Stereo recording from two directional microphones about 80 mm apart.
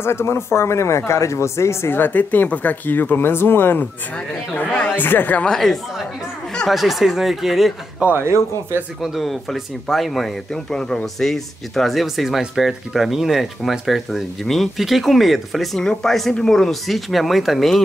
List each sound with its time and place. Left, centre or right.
0.0 s speech: left
4.6 s speech: centre
4.9 s speech: left
5.5 s speech: centre
8.0 s speech: right
9.0 s speech: centre